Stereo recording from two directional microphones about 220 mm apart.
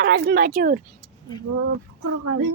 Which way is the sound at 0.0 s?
50° right (ahead or behind).